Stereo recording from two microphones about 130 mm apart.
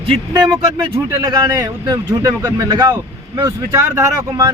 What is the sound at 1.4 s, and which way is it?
Speech, 25° right (ahead or behind).